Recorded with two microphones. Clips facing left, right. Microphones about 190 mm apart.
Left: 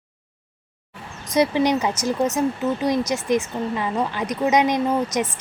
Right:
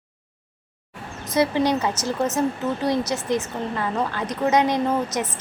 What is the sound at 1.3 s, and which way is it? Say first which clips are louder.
A woman's voice: left 1 dB; 15° left (ahead or behind).